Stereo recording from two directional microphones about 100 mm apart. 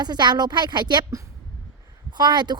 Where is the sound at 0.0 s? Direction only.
45° right (ahead or behind).